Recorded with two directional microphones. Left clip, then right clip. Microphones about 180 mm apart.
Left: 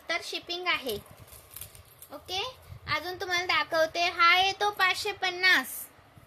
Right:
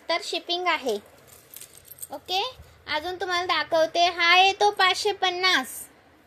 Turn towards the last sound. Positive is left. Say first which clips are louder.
# right 1 dB
turn(degrees=-10)  # may be behind; listen again after turning